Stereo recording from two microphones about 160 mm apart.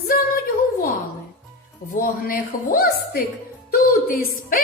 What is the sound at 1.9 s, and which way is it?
A woman's voice, 60° left (ahead or behind).